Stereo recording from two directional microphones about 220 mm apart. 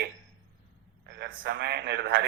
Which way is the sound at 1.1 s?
55° right (ahead or behind).